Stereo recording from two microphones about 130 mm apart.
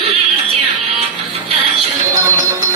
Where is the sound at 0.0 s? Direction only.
50° right (ahead or behind).